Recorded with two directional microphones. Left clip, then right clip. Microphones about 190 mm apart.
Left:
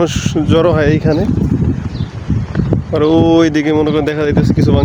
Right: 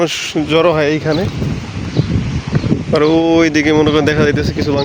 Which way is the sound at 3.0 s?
30° left (ahead or behind).